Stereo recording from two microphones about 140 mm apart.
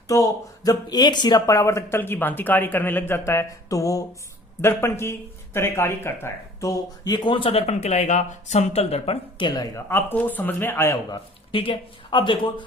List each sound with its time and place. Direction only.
0.1 s speech: 25° left (ahead or behind); by 9.1 s 50° left (ahead or behind)
9.6 s speech: 20° left (ahead or behind)
11.5 s speech: 40° left (ahead or behind)